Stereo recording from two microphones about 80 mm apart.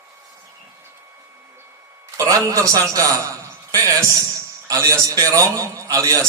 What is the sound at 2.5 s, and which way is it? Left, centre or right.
A man's voice, right.